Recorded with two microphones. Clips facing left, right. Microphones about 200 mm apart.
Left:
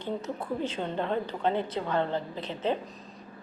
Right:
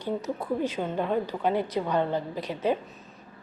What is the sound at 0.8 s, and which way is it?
A woman's voice, 10° right (ahead or behind).